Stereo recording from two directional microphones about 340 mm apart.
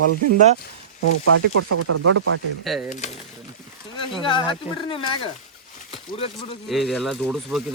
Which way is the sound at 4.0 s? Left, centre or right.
Centre.